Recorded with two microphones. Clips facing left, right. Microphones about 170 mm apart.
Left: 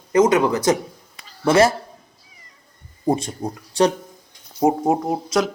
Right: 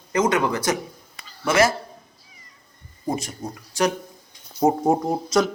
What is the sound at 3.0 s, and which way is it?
Speech, 30° left (ahead or behind).